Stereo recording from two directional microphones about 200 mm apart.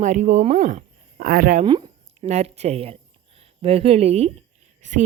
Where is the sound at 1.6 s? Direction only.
25° right (ahead or behind).